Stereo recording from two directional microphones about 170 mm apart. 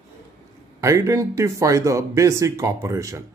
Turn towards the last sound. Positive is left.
turn(degrees=-20)  # may be behind; listen again after turning